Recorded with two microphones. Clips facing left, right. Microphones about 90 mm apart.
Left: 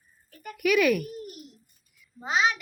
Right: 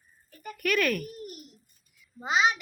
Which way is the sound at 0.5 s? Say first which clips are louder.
Left 5 dB; 10° left (ahead or behind).